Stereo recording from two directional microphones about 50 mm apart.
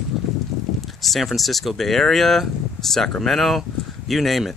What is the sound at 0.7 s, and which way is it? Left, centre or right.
Speech, centre.